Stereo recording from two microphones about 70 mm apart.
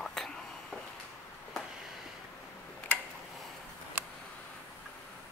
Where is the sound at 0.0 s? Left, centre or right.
Centre.